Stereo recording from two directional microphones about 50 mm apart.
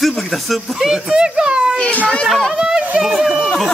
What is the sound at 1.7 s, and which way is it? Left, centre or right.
Speech, left.